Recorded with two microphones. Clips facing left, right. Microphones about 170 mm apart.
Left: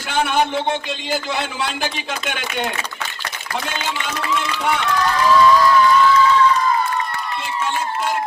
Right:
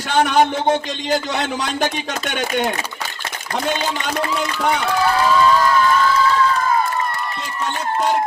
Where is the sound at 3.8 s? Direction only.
40° right (ahead or behind).